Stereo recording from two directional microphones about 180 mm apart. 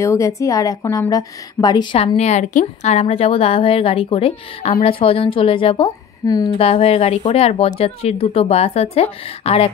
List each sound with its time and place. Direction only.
0.0 s a woman's voice: 15° left (ahead or behind)
2.1 s a woman's voice: 40° left (ahead or behind); by 6.5 s 25° left (ahead or behind)
6.6 s speech: 35° left (ahead or behind)